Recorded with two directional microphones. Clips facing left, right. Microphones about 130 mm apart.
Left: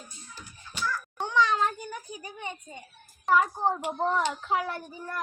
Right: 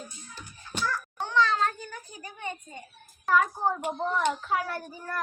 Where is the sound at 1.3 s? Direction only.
15° left (ahead or behind).